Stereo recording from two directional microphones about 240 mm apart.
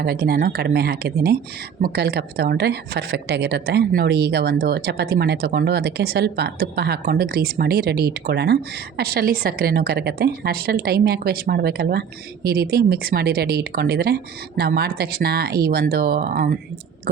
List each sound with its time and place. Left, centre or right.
0.0 s speech: right